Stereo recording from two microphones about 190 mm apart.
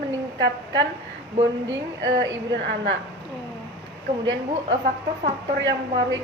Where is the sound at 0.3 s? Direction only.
70° right (ahead or behind).